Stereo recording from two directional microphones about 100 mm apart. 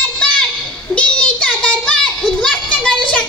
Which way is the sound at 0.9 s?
10° left (ahead or behind).